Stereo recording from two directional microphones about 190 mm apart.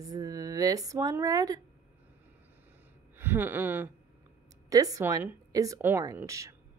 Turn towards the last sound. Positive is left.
turn(degrees=-15)  # may be behind; listen again after turning